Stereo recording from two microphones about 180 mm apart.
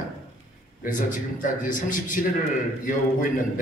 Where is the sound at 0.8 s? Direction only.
45° left (ahead or behind).